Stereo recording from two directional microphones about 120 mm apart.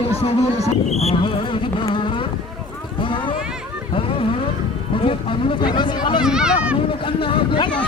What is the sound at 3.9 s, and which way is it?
Vehicle, 50° left (ahead or behind).